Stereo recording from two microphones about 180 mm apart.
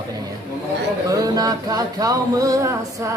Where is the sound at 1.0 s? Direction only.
20° right (ahead or behind).